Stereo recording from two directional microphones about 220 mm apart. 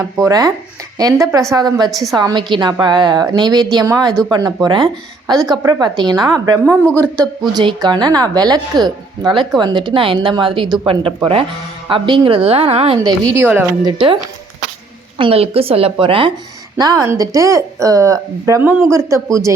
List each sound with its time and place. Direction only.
0.2 s a woman's voice: 15° right (ahead or behind)
1.9 s a man's voice: centre (ahead or behind)
2.1 s a woman's voice: 20° right (ahead or behind)
6.9 s a man's voice: 5° left (ahead or behind)
7.5 s a woman's voice: 20° right (ahead or behind)
15.2 s a woman's voice: 25° right (ahead or behind)